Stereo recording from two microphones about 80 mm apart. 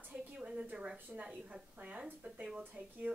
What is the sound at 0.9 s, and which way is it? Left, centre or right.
A woman's voice, centre.